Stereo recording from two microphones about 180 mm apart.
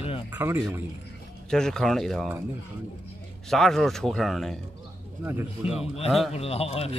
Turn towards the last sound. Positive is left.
turn(degrees=35)  # may be behind; listen again after turning